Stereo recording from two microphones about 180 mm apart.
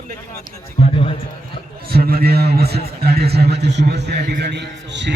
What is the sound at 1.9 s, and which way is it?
A man's voice, 55° right (ahead or behind).